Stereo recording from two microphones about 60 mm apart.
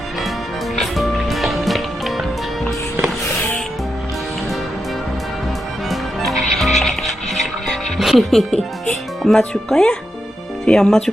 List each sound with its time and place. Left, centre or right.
0.8 s music: centre
5.9 s music: centre
7.9 s speech: centre